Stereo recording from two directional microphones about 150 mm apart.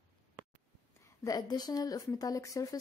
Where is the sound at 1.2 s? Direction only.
25° left (ahead or behind).